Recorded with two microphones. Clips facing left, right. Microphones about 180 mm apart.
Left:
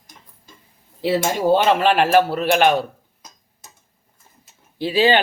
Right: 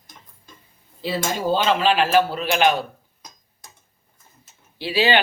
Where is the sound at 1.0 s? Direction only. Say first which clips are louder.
Left 5 dB; 65° left (ahead or behind).